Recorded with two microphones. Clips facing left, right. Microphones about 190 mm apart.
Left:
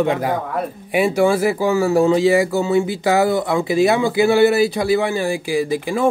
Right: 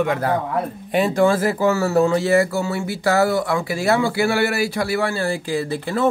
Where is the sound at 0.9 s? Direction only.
10° left (ahead or behind).